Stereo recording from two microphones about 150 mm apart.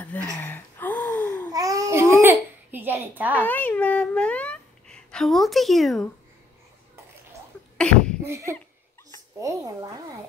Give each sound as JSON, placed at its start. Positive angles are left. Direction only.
{"t": 0.4, "sound": "a sound", "side_deg": 15}
{"t": 1.5, "sound": "babbling", "side_deg": -25}
{"t": 2.7, "sound": "a woman's voice", "side_deg": -15}
{"t": 3.3, "sound": "speech", "side_deg": 10}
{"t": 7.7, "sound": "sneeze", "side_deg": 5}
{"t": 8.2, "sound": "a woman's voice", "side_deg": -20}